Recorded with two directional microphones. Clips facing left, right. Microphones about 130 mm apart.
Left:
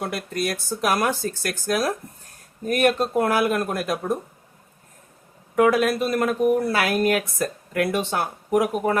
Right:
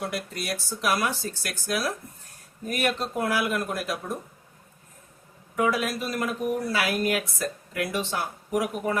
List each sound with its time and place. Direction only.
0.0 s speech: 50° left (ahead or behind)
5.5 s speech: 55° left (ahead or behind)